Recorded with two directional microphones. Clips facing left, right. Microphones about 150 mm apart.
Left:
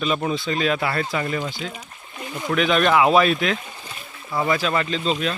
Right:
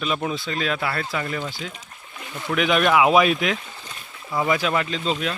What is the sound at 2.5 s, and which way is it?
Speech, 10° right (ahead or behind).